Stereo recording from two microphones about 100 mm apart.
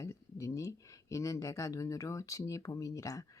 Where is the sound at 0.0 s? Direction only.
30° left (ahead or behind).